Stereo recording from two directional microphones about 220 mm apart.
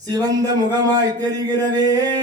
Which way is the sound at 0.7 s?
15° right (ahead or behind).